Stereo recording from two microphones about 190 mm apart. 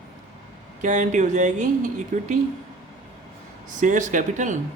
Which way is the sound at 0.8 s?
40° right (ahead or behind).